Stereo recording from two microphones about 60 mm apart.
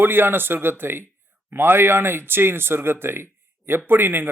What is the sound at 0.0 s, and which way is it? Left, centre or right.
Speech, right.